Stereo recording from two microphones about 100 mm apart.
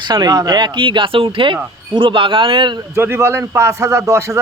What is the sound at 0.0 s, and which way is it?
A man's voice, 45° right (ahead or behind).